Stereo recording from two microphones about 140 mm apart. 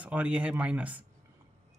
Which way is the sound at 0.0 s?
10° right (ahead or behind).